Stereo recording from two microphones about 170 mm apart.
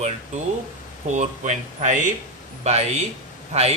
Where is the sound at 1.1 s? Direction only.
45° right (ahead or behind).